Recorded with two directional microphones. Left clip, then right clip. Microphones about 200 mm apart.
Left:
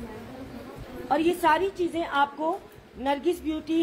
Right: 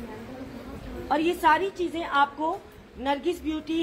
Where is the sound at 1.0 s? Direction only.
25° left (ahead or behind).